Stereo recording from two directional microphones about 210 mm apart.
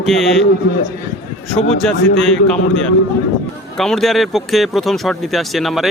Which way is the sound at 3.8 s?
Centre (ahead or behind).